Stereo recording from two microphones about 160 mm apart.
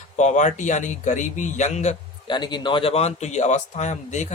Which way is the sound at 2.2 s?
30° left (ahead or behind).